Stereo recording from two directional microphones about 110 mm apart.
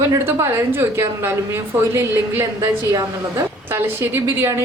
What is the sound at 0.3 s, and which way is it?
A woman's voice, 20° right (ahead or behind).